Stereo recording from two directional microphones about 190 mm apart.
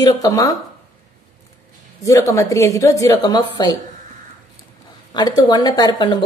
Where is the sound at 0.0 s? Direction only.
20° left (ahead or behind).